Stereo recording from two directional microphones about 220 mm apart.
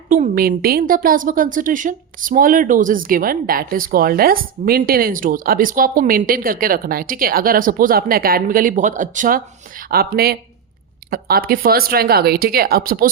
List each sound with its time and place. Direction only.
0.1 s a woman's voice: 40° right (ahead or behind)